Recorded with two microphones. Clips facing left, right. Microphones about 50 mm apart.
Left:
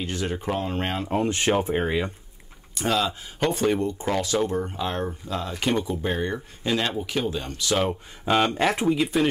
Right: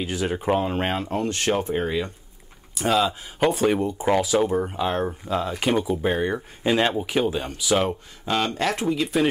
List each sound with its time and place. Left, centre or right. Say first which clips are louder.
0.0 s speech: right 3 dB; centre
1.0 s speech: left 1 dB; centre
2.7 s speech: right 3 dB; centre
8.3 s speech: left 2 dB; centre